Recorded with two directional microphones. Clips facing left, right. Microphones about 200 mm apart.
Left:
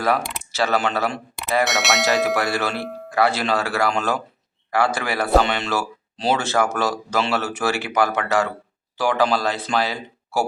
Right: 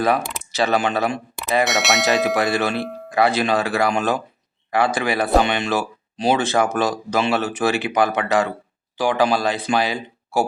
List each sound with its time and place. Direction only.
0.5 s speech: 15° right (ahead or behind)
1.6 s speech: centre (ahead or behind)
2.3 s speech: 20° right (ahead or behind)
2.8 s speech: centre (ahead or behind)
3.1 s speech: 20° right (ahead or behind)